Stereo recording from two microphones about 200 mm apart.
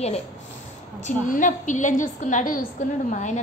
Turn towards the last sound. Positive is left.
turn(degrees=40)  # may be behind; listen again after turning